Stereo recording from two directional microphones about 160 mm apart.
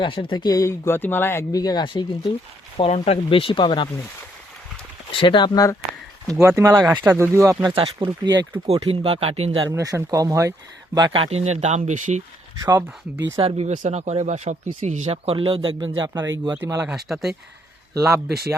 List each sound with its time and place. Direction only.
0.0 s speech: 30° left (ahead or behind)
5.1 s speech: 30° left (ahead or behind)
6.6 s speech: 20° right (ahead or behind)
7.6 s speech: 35° right (ahead or behind)
8.6 s speech: 40° right (ahead or behind)
9.6 s speech: 20° right (ahead or behind); by 12.2 s 50° right (ahead or behind)
12.6 s speech: 25° right (ahead or behind)
13.4 s speech: 40° right (ahead or behind); by 16.8 s 20° right (ahead or behind)
17.1 s speech: centre (ahead or behind)